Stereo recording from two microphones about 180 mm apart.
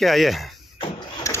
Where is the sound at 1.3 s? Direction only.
15° left (ahead or behind).